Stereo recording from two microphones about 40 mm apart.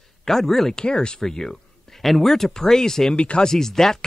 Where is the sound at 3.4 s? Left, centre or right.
Centre.